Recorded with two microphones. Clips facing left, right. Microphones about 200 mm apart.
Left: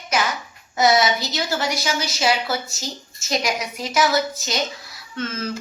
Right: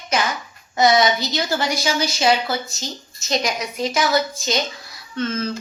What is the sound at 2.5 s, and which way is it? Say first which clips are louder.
A woman's voice: right 1 dB; 5° left (ahead or behind).